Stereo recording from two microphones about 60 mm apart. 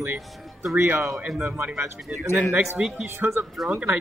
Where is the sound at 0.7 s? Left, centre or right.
Right.